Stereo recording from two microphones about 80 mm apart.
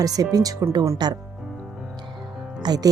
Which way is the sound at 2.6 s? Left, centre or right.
Right.